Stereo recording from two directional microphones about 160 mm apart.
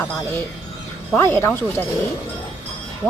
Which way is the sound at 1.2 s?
15° left (ahead or behind).